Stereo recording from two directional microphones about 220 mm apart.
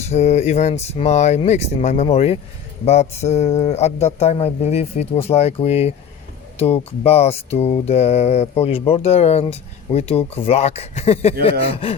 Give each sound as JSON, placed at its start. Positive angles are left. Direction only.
{"t": 0.0, "sound": "speech", "side_deg": 30}
{"t": 2.8, "sound": "mantra", "side_deg": 30}